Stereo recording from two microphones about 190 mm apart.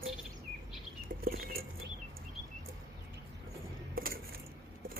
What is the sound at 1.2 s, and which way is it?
Bird flight, 50° right (ahead or behind).